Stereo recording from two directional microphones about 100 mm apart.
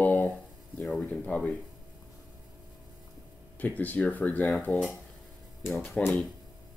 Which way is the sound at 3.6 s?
15° left (ahead or behind).